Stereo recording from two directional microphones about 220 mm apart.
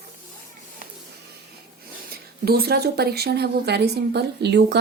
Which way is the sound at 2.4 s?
45° right (ahead or behind).